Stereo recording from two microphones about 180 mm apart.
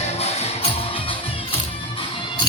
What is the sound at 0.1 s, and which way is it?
Music, 35° left (ahead or behind).